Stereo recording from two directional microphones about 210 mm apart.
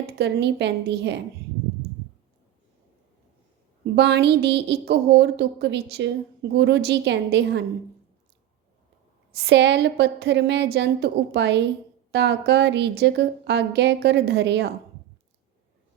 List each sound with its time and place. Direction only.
0.2 s a woman's voice: 55° right (ahead or behind)
3.9 s speech: 55° right (ahead or behind)
9.3 s a woman's voice: 55° right (ahead or behind)